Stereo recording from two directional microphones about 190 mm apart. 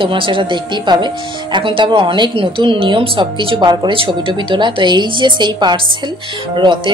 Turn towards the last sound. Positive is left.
turn(degrees=-25)  # may be behind; listen again after turning